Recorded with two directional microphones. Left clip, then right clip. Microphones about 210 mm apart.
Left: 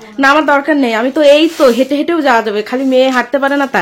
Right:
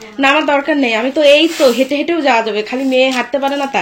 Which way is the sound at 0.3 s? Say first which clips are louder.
Left 3 dB; 25° left (ahead or behind).